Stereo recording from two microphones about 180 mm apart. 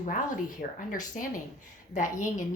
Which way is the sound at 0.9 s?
50° left (ahead or behind).